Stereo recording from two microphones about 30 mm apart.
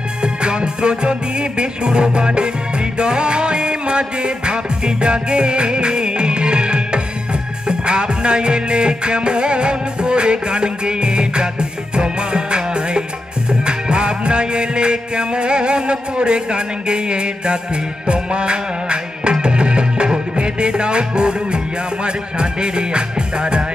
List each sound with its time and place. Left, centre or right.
0.2 s music: right